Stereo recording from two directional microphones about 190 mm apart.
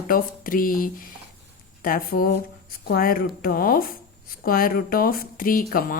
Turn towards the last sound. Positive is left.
turn(degrees=50)  # may be behind; listen again after turning